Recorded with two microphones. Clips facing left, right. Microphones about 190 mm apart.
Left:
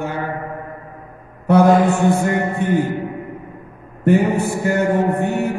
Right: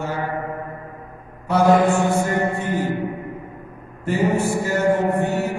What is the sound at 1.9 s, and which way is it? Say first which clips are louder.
A man's voice: left 3 dB; 60° left (ahead or behind).